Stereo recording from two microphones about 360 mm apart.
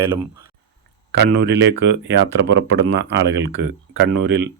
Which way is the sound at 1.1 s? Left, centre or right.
Right.